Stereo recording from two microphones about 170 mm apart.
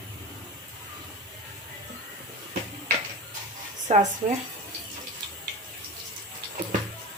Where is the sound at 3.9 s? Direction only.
40° right (ahead or behind).